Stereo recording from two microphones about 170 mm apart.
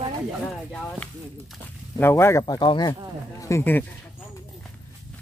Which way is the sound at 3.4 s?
15° left (ahead or behind).